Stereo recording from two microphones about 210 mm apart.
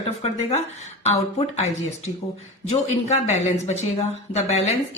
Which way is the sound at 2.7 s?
30° left (ahead or behind).